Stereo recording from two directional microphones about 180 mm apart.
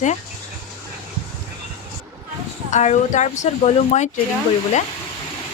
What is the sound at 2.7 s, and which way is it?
Speech, 40° left (ahead or behind).